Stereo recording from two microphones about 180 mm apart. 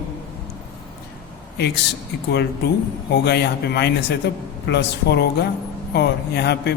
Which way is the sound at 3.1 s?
65° left (ahead or behind).